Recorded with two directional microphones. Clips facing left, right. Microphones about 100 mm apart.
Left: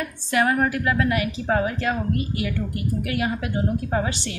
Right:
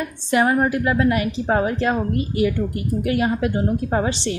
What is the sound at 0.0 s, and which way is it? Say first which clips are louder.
A woman's voice: right 3 dB; 25° right (ahead or behind).